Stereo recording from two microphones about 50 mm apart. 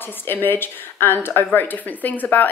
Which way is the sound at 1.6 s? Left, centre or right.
Left.